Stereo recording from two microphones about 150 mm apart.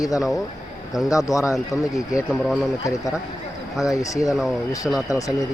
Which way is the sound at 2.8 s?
20° left (ahead or behind).